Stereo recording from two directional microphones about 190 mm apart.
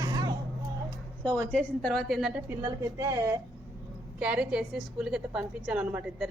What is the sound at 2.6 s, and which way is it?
A woman's voice, 15° right (ahead or behind).